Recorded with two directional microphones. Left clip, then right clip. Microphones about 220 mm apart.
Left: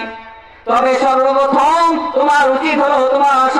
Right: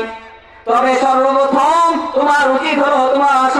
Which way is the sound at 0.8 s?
25° left (ahead or behind).